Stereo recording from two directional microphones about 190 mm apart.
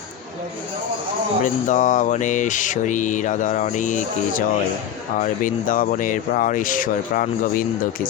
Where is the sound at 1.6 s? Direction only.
40° left (ahead or behind).